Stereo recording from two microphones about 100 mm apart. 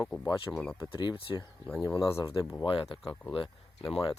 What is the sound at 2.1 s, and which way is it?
Speech, 30° left (ahead or behind).